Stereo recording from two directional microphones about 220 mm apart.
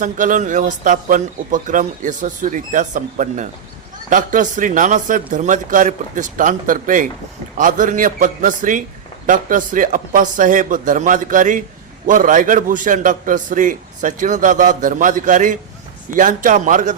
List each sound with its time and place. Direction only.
0.0 s a man's voice: 35° right (ahead or behind)